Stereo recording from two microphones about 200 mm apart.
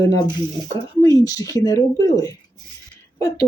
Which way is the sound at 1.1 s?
15° left (ahead or behind).